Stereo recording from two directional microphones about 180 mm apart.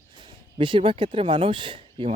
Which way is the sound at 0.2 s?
25° right (ahead or behind).